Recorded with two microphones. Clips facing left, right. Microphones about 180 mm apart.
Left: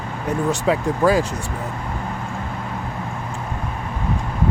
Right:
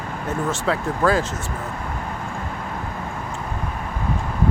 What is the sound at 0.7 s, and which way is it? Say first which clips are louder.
Speech: left 3 dB; 15° left (ahead or behind).